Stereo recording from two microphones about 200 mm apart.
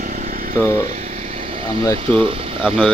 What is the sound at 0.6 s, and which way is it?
Speech, 15° left (ahead or behind).